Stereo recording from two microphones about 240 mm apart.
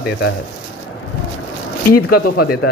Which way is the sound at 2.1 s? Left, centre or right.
Left.